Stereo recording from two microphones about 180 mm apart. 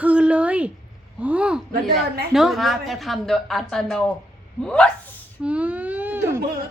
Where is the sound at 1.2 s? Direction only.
5° right (ahead or behind).